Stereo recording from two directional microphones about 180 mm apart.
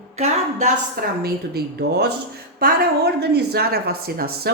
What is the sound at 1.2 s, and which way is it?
A woman's voice, 60° right (ahead or behind).